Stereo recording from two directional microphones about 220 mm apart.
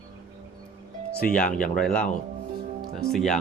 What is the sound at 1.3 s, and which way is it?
Speech, 5° left (ahead or behind).